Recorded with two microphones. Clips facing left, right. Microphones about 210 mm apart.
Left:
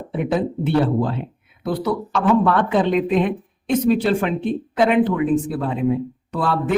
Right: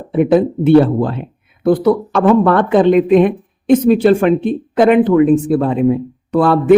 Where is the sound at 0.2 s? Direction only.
60° right (ahead or behind).